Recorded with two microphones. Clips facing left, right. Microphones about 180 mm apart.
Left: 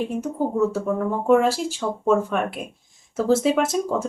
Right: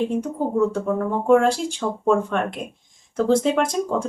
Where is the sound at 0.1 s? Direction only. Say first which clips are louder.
Right 1 dB; 5° left (ahead or behind).